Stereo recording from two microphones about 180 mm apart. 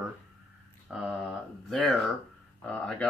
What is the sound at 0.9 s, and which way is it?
Speech, centre (ahead or behind).